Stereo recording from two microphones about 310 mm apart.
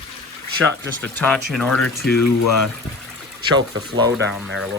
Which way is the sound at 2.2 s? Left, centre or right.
Left.